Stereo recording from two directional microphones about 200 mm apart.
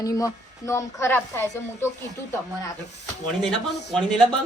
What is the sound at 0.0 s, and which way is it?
A woman's voice, 15° left (ahead or behind).